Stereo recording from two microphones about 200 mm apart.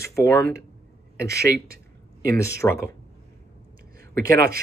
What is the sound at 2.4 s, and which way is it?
Speech, 15° left (ahead or behind).